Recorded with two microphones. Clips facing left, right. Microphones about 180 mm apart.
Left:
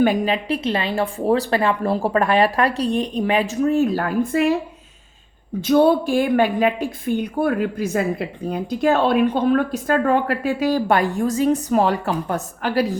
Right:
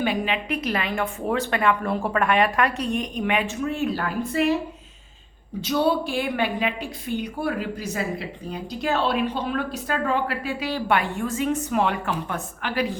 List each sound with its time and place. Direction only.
0.0 s speech: 40° left (ahead or behind)
5.6 s a woman's voice: 50° left (ahead or behind)